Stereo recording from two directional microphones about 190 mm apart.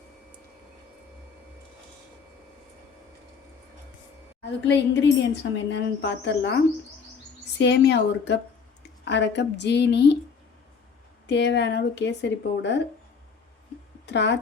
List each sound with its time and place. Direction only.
4.6 s a woman's voice: 65° left (ahead or behind)
7.6 s a woman's voice: 65° left (ahead or behind)
11.3 s a woman's voice: 65° left (ahead or behind)
14.1 s speech: 65° left (ahead or behind)